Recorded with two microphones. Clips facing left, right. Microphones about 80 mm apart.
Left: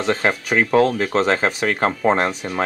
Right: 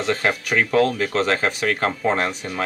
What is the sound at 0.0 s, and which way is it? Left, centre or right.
Speech, left.